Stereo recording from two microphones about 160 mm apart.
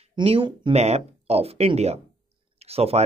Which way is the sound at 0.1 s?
35° right (ahead or behind).